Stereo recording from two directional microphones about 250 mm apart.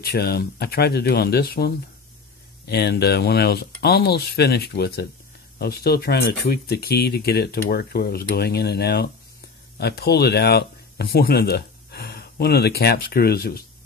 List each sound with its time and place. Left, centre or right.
0.0 s speech: left